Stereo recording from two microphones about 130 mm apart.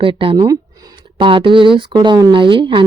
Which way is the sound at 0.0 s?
40° right (ahead or behind).